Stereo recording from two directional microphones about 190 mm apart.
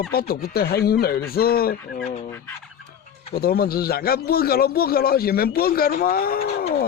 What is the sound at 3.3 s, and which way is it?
Speech, 55° left (ahead or behind).